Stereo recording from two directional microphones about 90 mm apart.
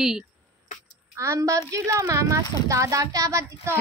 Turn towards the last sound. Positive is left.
turn(degrees=-25)  # may be behind; listen again after turning